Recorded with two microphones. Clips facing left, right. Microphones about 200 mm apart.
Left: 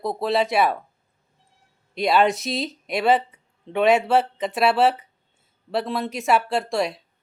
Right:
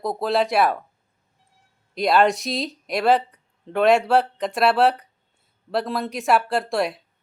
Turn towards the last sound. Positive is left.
turn(degrees=0)  # may be behind; listen again after turning